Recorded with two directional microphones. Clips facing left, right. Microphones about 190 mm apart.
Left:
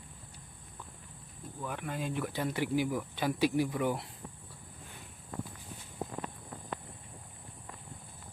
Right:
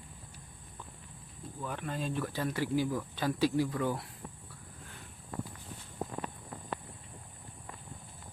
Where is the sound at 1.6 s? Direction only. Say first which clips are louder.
Even; 10° left (ahead or behind).